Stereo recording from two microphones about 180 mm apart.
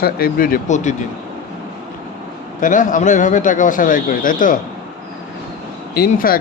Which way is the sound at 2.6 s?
45° left (ahead or behind).